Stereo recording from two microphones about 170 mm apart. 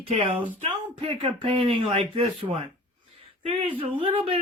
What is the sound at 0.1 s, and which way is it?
Speech, 35° right (ahead or behind).